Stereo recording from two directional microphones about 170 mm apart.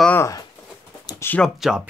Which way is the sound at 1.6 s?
5° right (ahead or behind).